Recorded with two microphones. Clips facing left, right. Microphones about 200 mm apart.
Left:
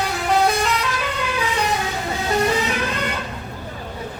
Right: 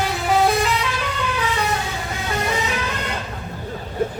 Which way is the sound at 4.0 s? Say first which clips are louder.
Right 11 dB; 50° right (ahead or behind).